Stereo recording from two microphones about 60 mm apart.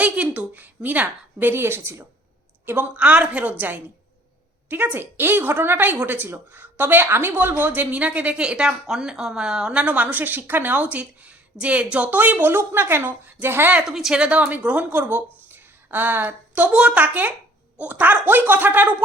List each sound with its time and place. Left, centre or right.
0.0 s a woman's voice: right
2.9 s a woman's voice: right
4.7 s a woman's voice: right
7.7 s speech: right
9.9 s a woman's voice: right
13.8 s speech: centre
14.5 s a woman's voice: right
16.6 s a woman's voice: right